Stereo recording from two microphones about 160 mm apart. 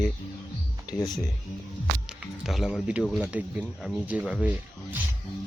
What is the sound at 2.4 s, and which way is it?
Speech, centre (ahead or behind).